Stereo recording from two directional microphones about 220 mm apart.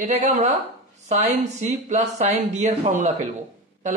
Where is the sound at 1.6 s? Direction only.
30° right (ahead or behind).